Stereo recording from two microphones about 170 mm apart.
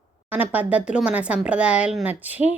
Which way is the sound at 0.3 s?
10° right (ahead or behind).